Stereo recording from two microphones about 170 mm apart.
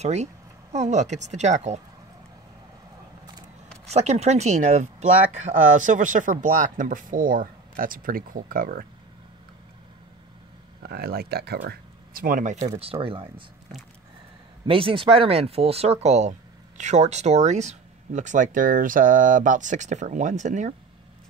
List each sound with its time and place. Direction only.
0.0 s speech: 40° right (ahead or behind)
3.8 s speech: 40° right (ahead or behind); by 8.8 s 60° right (ahead or behind)
10.8 s speech: 65° right (ahead or behind)
12.7 s speech: 35° right (ahead or behind)
14.7 s speech: 30° right (ahead or behind)